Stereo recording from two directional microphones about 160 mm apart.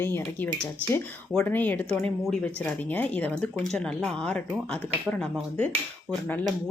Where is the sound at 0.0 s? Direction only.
15° left (ahead or behind).